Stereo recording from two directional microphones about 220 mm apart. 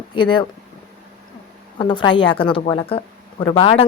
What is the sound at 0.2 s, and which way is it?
Speech, 20° left (ahead or behind).